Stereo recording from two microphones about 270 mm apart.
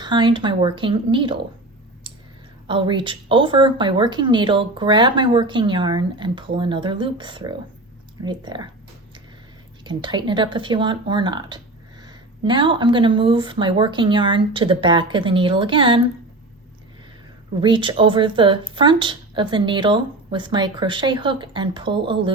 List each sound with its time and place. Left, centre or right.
0.0 s speech: centre
2.6 s speech: centre
9.8 s speech: centre
17.6 s speech: centre